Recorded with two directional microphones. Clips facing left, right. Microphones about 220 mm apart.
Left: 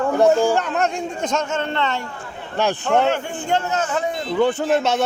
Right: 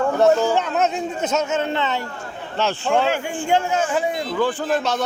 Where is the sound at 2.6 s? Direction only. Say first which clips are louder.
Left 2 dB; 15° left (ahead or behind).